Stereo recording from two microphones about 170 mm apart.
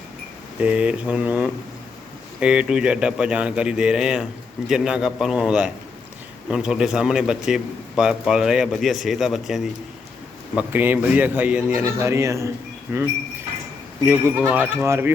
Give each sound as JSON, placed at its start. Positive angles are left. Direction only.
{"t": 0.6, "sound": "a man's voice", "side_deg": -5}